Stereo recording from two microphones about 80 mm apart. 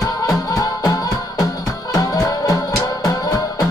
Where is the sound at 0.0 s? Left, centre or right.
Left.